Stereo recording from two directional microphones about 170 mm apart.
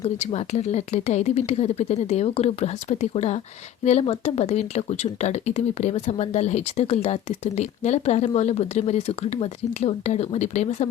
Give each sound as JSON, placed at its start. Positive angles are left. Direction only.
{"t": 0.0, "sound": "speech", "side_deg": 40}